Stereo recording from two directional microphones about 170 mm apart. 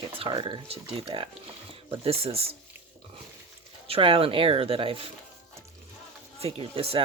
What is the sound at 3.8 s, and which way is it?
Speech, 35° right (ahead or behind).